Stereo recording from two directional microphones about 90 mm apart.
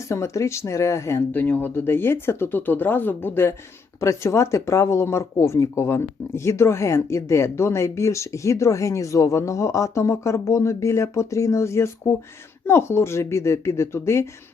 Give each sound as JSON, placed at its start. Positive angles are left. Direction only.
{"t": 0.1, "sound": "speech", "side_deg": 30}
{"t": 1.3, "sound": "speech", "side_deg": 20}